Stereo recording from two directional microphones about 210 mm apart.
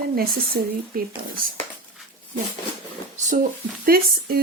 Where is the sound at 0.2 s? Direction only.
45° right (ahead or behind).